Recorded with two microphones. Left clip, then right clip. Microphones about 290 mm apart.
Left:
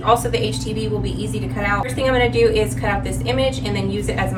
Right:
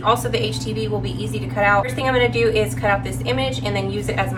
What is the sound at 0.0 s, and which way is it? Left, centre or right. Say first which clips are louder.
A woman's voice: left 2 dB; centre.